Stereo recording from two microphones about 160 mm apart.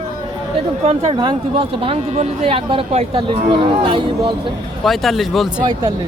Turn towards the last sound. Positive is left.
turn(degrees=0)  # may be behind; listen again after turning